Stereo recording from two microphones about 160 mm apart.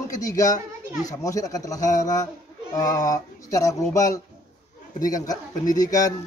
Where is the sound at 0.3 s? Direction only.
20° left (ahead or behind).